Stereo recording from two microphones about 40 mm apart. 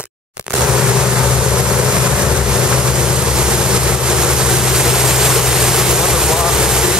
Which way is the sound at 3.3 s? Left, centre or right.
Right.